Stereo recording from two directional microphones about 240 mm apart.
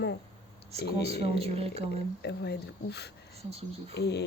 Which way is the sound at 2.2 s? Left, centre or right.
Left.